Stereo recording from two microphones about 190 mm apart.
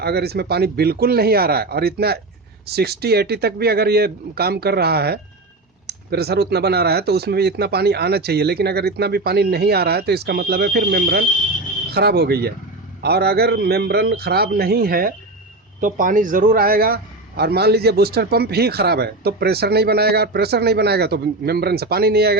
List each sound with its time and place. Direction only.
0.0 s a man's voice: 55° right (ahead or behind)